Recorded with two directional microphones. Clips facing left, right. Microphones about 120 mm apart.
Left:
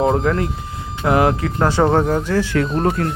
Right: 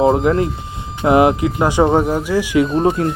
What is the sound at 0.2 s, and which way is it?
Speech, 25° right (ahead or behind).